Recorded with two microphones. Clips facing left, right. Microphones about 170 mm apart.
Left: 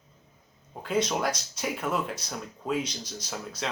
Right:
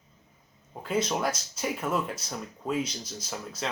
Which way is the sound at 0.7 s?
5° right (ahead or behind).